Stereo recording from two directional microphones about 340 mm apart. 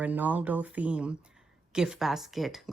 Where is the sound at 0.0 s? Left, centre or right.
Centre.